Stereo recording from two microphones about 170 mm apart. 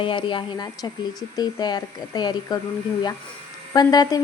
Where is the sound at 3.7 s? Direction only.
25° left (ahead or behind).